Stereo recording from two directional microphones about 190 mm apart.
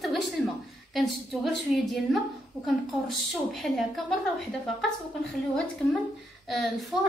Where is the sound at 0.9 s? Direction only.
Centre (ahead or behind).